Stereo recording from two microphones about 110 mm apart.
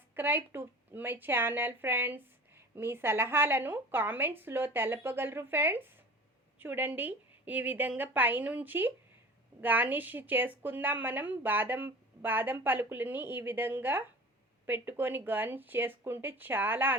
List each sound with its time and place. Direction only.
0.1 s a woman's voice: 20° right (ahead or behind)